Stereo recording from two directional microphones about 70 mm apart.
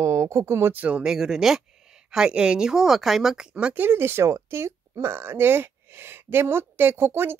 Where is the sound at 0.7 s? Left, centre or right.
Centre.